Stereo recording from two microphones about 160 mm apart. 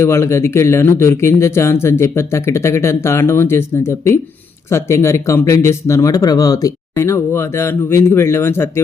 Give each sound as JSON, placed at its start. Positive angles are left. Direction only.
{"t": 0.0, "sound": "speech", "side_deg": 15}